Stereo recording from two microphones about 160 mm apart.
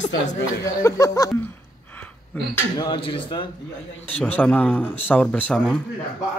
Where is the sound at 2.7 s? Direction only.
30° left (ahead or behind).